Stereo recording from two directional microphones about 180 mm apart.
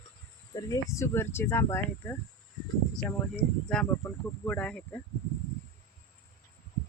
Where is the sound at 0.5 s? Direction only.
20° left (ahead or behind).